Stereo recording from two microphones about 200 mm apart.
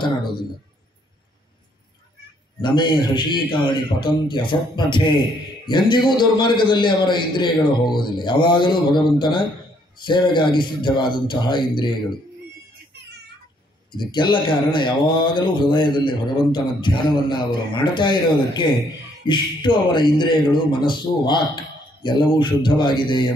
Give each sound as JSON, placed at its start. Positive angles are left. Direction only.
{"t": 0.0, "sound": "a man's voice", "side_deg": 25}
{"t": 2.6, "sound": "speech", "side_deg": 25}
{"t": 13.9, "sound": "speech", "side_deg": 25}